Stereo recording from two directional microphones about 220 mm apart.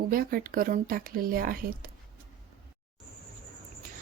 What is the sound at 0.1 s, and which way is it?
Speech, 40° right (ahead or behind).